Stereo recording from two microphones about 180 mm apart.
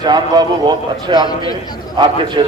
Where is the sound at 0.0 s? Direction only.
25° right (ahead or behind).